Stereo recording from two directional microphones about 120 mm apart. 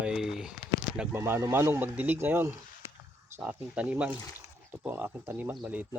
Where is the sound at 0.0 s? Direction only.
5° right (ahead or behind).